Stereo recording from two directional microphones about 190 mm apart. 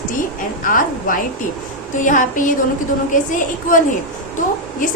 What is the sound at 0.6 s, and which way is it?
A woman's voice, 45° left (ahead or behind).